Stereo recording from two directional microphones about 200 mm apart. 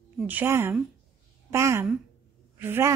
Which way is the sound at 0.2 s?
10° right (ahead or behind).